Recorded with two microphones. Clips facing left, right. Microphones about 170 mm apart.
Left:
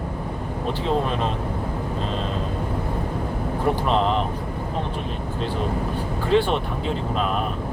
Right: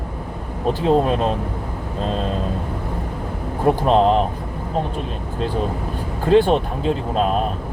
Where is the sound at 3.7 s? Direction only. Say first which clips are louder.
Right 7 dB; 40° right (ahead or behind).